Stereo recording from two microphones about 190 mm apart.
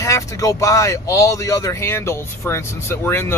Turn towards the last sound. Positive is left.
turn(degrees=10)  # may be behind; listen again after turning